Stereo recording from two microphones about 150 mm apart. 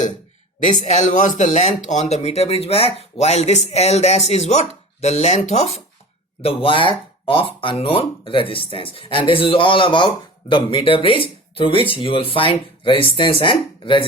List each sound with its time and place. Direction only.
0.6 s speech: 55° left (ahead or behind); by 14.0 s 35° left (ahead or behind)